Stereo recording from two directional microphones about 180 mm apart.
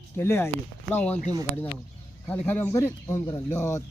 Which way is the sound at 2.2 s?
10° left (ahead or behind).